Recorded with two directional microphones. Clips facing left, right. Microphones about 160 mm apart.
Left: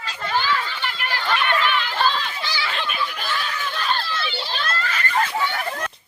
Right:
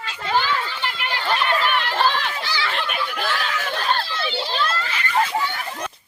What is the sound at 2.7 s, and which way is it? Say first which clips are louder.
Snicker: right 1 dB; 55° right (ahead or behind).